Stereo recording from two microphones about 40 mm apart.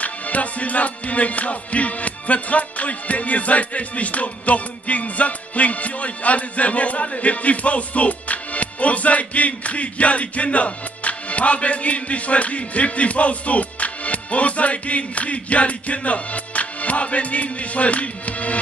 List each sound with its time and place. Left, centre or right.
0.0 s music: left